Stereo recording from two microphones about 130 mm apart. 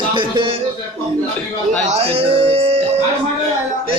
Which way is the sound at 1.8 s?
55° right (ahead or behind).